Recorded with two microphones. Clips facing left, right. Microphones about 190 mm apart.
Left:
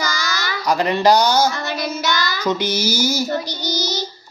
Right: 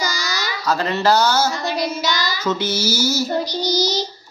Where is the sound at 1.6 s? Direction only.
55° left (ahead or behind).